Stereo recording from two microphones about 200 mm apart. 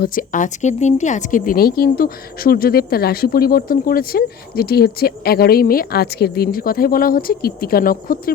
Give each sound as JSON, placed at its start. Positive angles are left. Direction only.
{"t": 0.0, "sound": "speech", "side_deg": 45}